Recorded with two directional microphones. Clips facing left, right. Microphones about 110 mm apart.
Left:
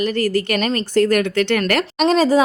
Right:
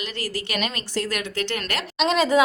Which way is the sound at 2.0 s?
35° left (ahead or behind).